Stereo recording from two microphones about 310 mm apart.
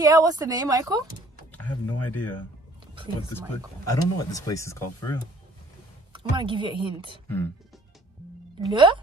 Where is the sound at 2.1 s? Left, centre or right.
Centre.